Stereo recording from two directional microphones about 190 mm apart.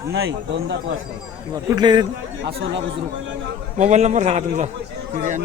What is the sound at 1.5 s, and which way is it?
Speech, 20° right (ahead or behind).